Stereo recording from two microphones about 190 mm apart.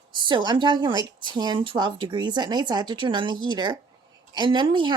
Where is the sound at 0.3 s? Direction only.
25° right (ahead or behind).